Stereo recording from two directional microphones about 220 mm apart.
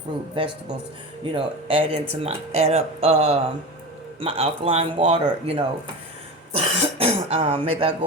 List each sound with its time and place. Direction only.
0.4 s speech: 25° right (ahead or behind)